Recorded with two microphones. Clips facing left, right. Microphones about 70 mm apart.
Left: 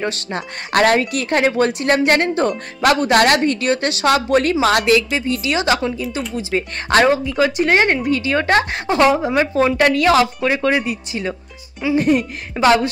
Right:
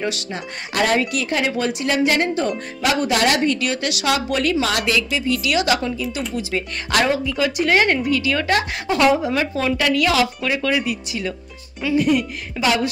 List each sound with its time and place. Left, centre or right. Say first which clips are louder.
0.0 s speech: left 2 dB; left